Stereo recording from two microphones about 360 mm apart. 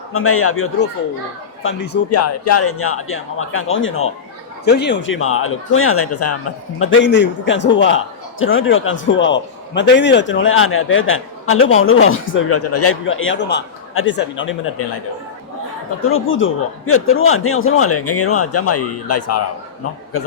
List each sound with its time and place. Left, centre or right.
0.1 s a man's voice: left
2.0 s a man's voice: left
16.0 s a man's voice: left